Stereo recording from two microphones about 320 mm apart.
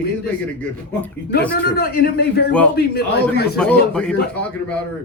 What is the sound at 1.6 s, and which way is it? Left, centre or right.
A man's voice, left.